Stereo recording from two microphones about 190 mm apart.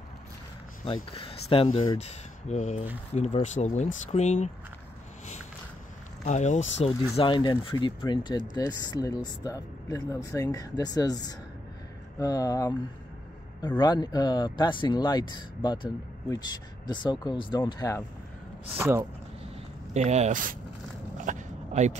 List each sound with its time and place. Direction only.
1.1 s speech: 30° left (ahead or behind)
6.2 s speech: 40° left (ahead or behind); by 12.7 s 20° left (ahead or behind)
13.7 s speech: 20° left (ahead or behind)
18.8 s speech: 10° right (ahead or behind)
19.9 s speech: 35° right (ahead or behind)
21.3 s dog: 40° right (ahead or behind)